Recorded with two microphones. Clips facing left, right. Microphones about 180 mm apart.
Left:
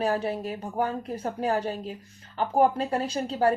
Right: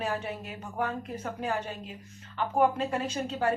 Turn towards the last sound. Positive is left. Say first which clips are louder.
# left 4 dB
turn(degrees=35)  # may be behind; listen again after turning